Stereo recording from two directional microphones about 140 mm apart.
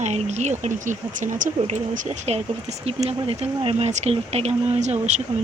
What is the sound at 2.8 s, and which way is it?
Speech, 45° right (ahead or behind).